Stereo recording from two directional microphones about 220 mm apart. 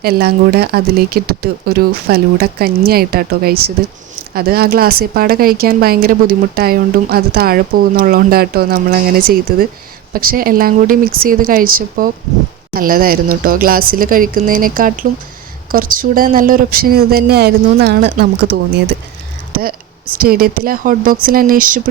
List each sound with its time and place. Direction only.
0.0 s speech: 45° right (ahead or behind)